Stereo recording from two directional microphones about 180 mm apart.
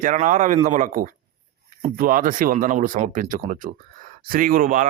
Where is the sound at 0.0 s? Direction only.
45° right (ahead or behind).